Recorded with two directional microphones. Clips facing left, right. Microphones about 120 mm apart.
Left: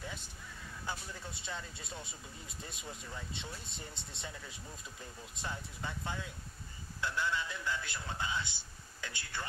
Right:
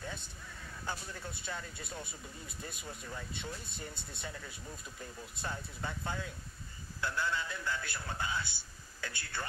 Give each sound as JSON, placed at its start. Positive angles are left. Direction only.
{"t": 0.0, "sound": "vehicle", "side_deg": 15}
{"t": 0.8, "sound": "speech", "side_deg": 15}